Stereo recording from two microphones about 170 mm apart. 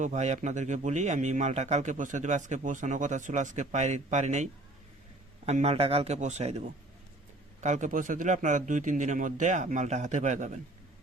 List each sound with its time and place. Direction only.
0.0 s speech: 45° right (ahead or behind)
5.5 s a man's voice: 40° right (ahead or behind)